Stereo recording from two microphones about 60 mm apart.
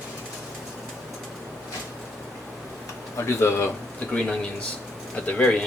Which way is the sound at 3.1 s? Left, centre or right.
Left.